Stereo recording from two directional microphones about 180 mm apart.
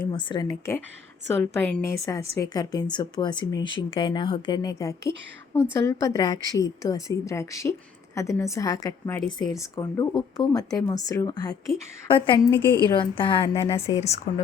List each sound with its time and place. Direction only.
0.0 s a woman's voice: 25° left (ahead or behind)
12.9 s speech: 25° left (ahead or behind)